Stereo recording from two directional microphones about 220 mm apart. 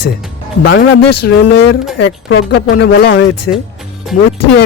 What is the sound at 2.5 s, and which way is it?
Speech, 50° left (ahead or behind).